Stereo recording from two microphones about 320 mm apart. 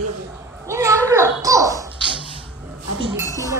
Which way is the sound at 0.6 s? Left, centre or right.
Centre.